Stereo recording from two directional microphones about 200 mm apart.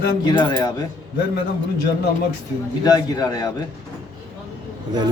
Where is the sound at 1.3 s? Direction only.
55° left (ahead or behind).